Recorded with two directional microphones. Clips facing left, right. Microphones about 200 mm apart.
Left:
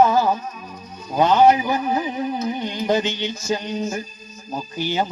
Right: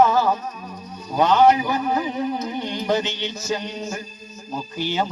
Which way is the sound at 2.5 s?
10° left (ahead or behind).